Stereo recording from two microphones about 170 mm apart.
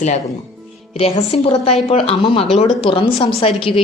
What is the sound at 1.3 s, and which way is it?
Speech, 35° left (ahead or behind).